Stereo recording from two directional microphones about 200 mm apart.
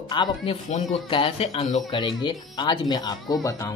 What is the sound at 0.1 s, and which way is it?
Speech, 20° left (ahead or behind).